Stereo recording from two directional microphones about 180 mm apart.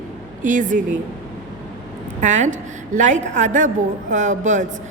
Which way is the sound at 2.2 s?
40° right (ahead or behind).